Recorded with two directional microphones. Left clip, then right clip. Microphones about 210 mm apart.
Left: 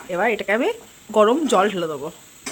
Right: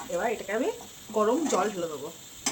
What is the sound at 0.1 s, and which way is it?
Speech, 50° left (ahead or behind).